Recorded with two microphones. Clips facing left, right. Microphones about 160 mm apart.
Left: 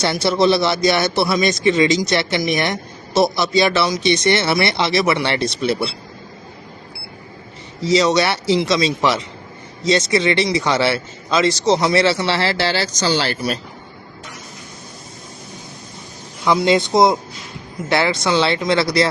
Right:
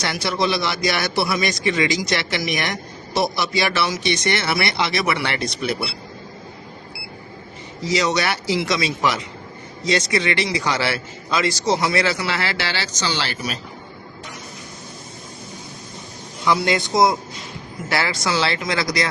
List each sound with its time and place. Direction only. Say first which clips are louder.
0.0 s a man's voice: left 6 dB; 30° left (ahead or behind)
7.9 s a man's voice: left 5 dB; 25° left (ahead or behind); by 13.6 s 40° left (ahead or behind)
16.5 s a man's voice: left 4 dB; 25° left (ahead or behind)